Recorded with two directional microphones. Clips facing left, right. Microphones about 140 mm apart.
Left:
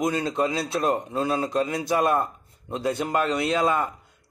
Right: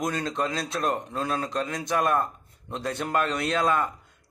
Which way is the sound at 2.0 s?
20° left (ahead or behind).